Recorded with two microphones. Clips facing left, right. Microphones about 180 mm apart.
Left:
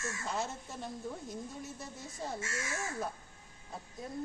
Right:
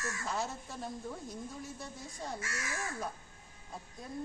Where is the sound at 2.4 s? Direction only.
25° left (ahead or behind).